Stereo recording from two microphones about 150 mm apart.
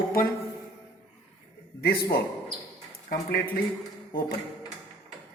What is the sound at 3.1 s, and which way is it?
Speech, 75° left (ahead or behind).